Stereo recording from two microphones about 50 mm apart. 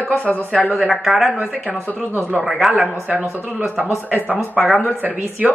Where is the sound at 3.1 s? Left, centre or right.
Right.